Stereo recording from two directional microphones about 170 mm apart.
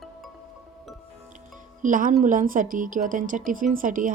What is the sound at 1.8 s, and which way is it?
Speech, 50° right (ahead or behind).